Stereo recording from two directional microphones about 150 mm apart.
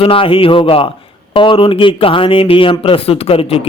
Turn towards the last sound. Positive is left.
turn(degrees=40)  # may be behind; listen again after turning